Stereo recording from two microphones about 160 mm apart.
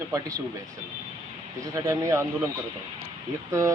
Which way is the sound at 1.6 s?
20° right (ahead or behind).